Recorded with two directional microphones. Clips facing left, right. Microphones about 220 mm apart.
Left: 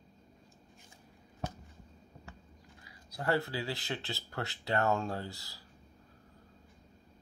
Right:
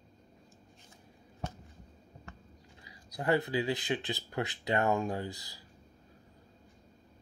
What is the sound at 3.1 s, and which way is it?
Speech, 15° right (ahead or behind).